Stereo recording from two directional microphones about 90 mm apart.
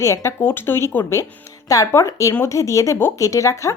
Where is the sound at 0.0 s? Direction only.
30° left (ahead or behind).